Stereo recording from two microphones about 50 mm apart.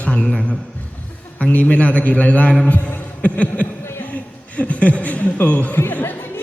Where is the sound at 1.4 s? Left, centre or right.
Left.